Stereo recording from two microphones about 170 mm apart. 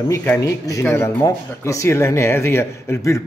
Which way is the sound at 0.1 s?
10° left (ahead or behind).